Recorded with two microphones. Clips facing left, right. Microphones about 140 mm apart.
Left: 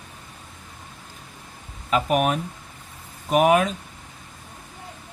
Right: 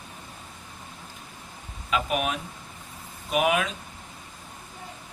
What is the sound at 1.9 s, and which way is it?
Speech, 45° left (ahead or behind).